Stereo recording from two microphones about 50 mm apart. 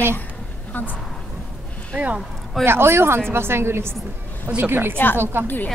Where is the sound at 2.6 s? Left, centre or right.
Right.